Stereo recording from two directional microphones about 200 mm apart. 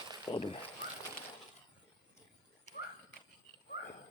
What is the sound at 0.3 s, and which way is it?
Speech, 25° left (ahead or behind).